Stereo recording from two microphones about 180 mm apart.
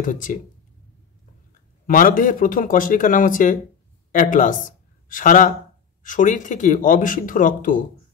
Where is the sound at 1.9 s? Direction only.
50° left (ahead or behind).